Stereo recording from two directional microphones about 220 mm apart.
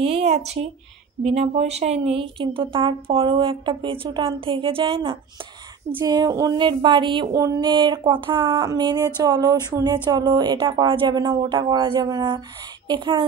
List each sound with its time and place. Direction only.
0.0 s a woman's voice: 25° right (ahead or behind)